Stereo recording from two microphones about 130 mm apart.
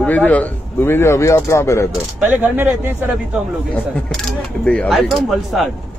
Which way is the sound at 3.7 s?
10° left (ahead or behind).